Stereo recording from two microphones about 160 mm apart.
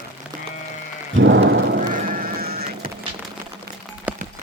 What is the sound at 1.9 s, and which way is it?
Music, 55° right (ahead or behind).